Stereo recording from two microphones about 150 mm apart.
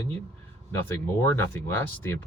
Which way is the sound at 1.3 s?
15° left (ahead or behind).